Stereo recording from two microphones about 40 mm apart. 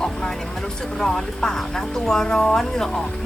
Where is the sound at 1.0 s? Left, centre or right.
Centre.